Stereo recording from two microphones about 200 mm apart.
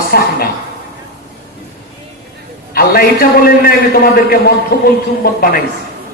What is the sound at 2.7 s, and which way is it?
A man's voice, 45° left (ahead or behind).